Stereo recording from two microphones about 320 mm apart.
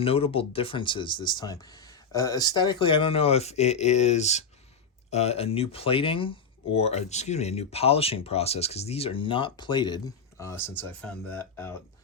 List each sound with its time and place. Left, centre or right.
0.0 s speech: centre